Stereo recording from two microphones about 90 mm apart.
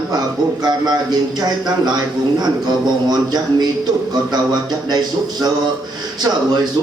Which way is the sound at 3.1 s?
50° right (ahead or behind).